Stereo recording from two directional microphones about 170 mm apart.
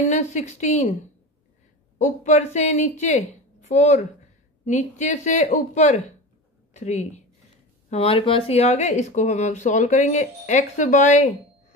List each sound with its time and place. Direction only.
0.1 s speech: 45° left (ahead or behind)
2.0 s a woman's voice: 45° left (ahead or behind)